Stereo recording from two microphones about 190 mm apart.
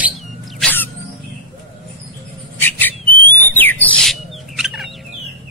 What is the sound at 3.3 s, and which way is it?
Bird, 10° left (ahead or behind).